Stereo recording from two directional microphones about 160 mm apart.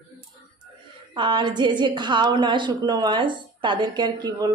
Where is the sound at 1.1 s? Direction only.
30° right (ahead or behind).